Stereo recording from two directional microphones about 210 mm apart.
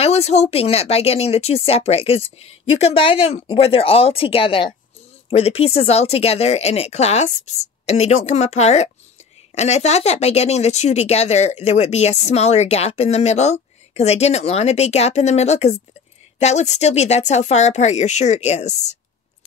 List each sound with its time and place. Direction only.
0.0 s speech: 30° left (ahead or behind)